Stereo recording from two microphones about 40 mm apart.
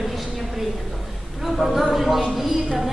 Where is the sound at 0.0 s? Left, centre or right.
Centre.